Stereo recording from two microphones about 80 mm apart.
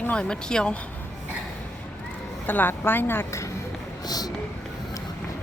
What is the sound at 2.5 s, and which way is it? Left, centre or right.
Speech, left.